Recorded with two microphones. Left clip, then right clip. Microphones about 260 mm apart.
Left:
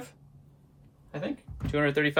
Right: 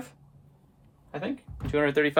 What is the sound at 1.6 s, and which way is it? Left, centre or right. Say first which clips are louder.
Speech: right 2 dB; right.